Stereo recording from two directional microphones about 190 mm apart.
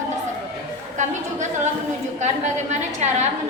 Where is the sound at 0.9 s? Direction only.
40° right (ahead or behind).